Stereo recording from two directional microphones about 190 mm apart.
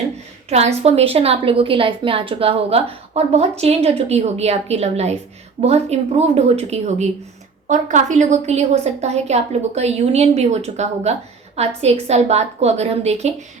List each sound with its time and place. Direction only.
0.5 s a woman's voice: 35° right (ahead or behind)